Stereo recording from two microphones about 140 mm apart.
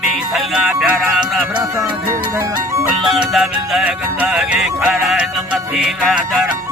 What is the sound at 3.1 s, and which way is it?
Music, centre (ahead or behind).